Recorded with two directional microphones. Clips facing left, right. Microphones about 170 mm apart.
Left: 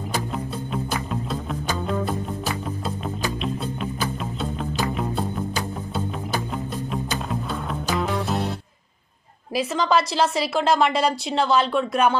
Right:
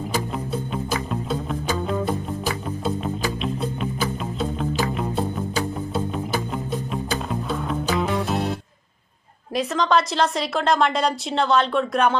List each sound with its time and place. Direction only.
1.1 s music: centre (ahead or behind)
6.5 s music: centre (ahead or behind)
8.3 s music: 15° right (ahead or behind)
9.6 s a woman's voice: 5° left (ahead or behind)